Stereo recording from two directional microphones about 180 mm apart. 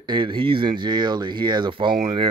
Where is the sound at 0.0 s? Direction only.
25° right (ahead or behind).